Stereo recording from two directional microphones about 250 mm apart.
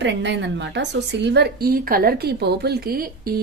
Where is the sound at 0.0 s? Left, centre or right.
Right.